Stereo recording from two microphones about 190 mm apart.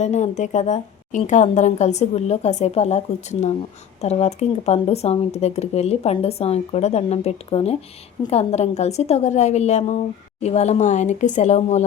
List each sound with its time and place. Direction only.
0.0 s speech: 35° left (ahead or behind)